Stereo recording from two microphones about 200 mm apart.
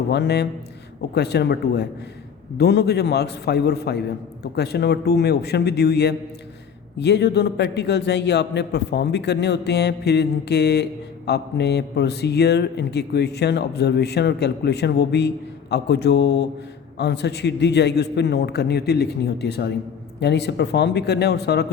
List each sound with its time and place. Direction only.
0.1 s speech: 55° left (ahead or behind)